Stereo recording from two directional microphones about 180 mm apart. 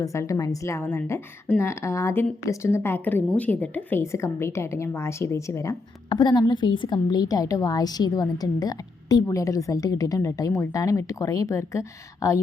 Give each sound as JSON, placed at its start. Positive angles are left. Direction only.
{"t": 0.0, "sound": "a woman's voice", "side_deg": 15}